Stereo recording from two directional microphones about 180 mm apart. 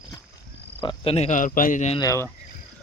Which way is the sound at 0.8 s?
30° left (ahead or behind).